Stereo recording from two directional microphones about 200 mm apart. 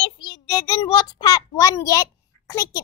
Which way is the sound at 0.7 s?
20° left (ahead or behind).